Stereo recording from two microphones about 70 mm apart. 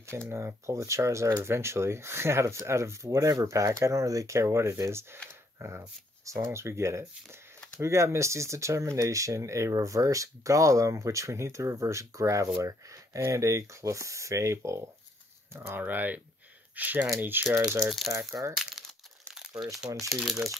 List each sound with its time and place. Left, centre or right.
0.0 s speech: right
15.8 s speech: right
17.8 s speech: centre
18.4 s speech: right
20.1 s speech: centre